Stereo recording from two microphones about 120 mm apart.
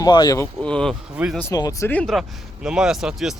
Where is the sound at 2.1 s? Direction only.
5° right (ahead or behind).